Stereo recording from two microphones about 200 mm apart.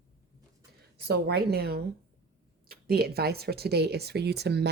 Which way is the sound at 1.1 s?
55° right (ahead or behind).